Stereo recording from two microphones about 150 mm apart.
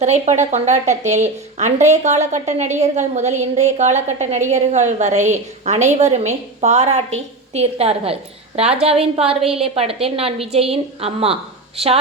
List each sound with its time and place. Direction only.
0.0 s a woman's voice: 50° right (ahead or behind)